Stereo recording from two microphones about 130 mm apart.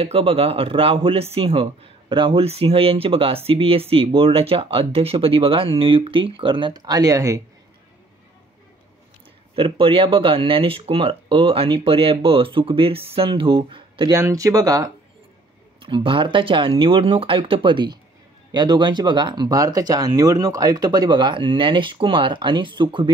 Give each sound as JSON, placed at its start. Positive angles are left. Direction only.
{"t": 0.0, "sound": "speech", "side_deg": -45}
{"t": 9.6, "sound": "speech", "side_deg": -45}
{"t": 14.1, "sound": "speech", "side_deg": -25}
{"t": 15.8, "sound": "speech", "side_deg": -40}